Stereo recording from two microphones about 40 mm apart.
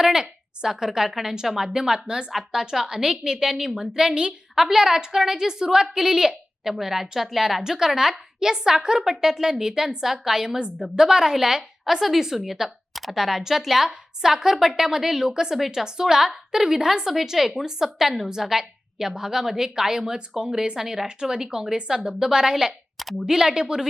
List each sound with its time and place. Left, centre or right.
0.0 s a woman's voice: centre
4.1 s a woman's voice: right
4.5 s a woman's voice: centre